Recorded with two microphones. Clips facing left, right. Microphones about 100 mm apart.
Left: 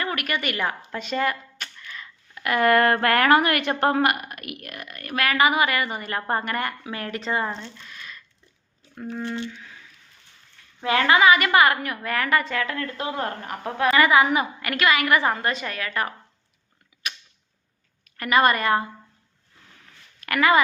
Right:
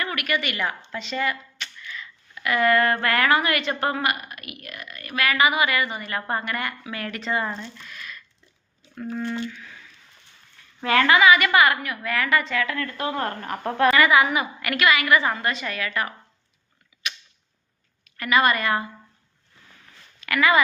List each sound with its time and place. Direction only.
0.0 s a woman's voice: 35° left (ahead or behind)
10.8 s a woman's voice: 20° left (ahead or behind); by 13.9 s 5° left (ahead or behind)
13.9 s a woman's voice: 35° left (ahead or behind)
16.9 s a sound: 50° left (ahead or behind)
18.0 s a woman's voice: 40° left (ahead or behind)
20.2 s a woman's voice: 40° left (ahead or behind)